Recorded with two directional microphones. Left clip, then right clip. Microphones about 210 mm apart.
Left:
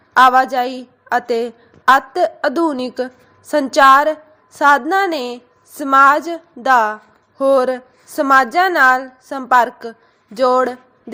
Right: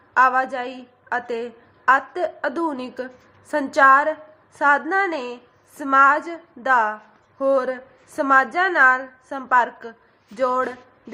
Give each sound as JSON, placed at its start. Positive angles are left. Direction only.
{"t": 0.1, "sound": "a woman's voice", "side_deg": 25}